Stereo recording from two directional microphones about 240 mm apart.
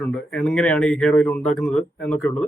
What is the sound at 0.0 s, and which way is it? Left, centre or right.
Speech, centre.